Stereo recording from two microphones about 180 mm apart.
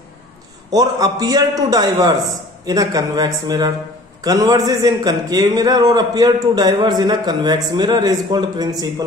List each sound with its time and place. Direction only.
0.7 s a man's voice: 20° right (ahead or behind)